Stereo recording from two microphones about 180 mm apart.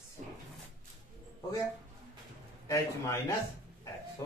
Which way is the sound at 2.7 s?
15° left (ahead or behind).